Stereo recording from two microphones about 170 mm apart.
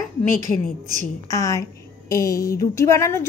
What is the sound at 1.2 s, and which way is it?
A woman's voice, 20° left (ahead or behind).